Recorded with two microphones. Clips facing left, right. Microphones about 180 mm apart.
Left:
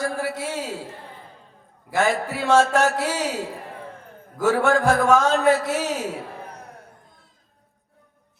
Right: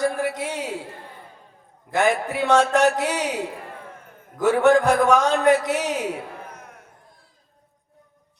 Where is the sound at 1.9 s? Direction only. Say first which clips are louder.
Right 1 dB; 20° right (ahead or behind).